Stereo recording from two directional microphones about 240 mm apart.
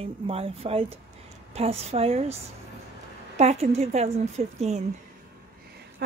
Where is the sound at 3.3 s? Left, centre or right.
Right.